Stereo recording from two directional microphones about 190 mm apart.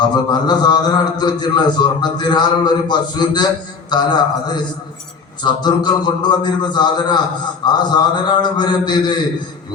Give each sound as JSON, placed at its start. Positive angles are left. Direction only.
{"t": 0.1, "sound": "a man's voice", "side_deg": 20}